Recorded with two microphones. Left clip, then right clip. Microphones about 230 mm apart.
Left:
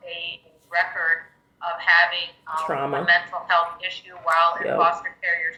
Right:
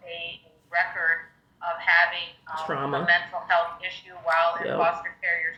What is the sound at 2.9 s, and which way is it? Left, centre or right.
A man's voice, centre.